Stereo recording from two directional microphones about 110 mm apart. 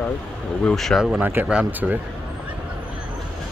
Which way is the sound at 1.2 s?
20° right (ahead or behind).